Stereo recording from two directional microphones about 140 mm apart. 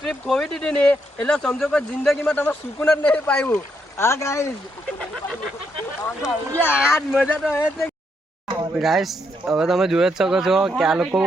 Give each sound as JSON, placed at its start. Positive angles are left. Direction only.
{"t": 0.0, "sound": "speech", "side_deg": 5}
{"t": 6.0, "sound": "speech", "side_deg": 15}
{"t": 7.2, "sound": "speech", "side_deg": 5}
{"t": 8.8, "sound": "speech", "side_deg": 0}